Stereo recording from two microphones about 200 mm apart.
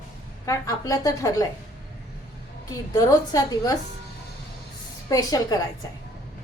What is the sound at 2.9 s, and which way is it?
Speech, 20° left (ahead or behind).